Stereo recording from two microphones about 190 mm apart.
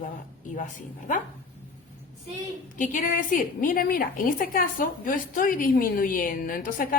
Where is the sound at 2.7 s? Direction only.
45° left (ahead or behind).